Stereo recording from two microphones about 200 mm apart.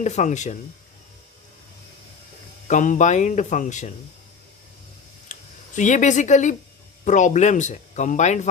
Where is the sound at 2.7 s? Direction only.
40° left (ahead or behind).